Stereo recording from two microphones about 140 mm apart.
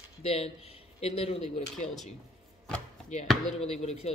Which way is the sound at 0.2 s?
45° left (ahead or behind).